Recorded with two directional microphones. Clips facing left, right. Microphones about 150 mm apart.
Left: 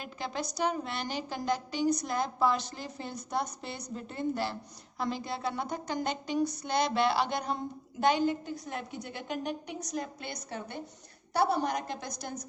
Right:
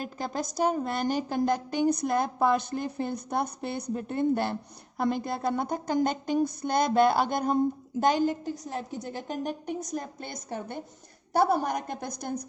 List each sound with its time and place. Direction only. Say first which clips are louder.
0.0 s a woman's voice: right 4 dB; 45° right (ahead or behind)